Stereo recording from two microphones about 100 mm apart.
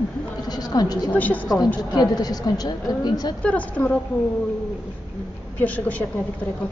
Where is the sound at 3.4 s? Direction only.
15° left (ahead or behind).